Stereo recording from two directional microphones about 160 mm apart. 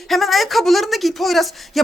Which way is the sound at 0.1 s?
Centre (ahead or behind).